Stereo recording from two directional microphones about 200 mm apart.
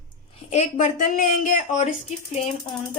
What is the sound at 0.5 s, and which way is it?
Speech, 35° left (ahead or behind).